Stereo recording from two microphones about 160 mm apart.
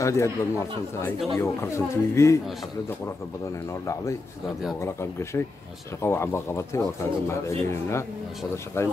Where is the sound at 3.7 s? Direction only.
20° left (ahead or behind).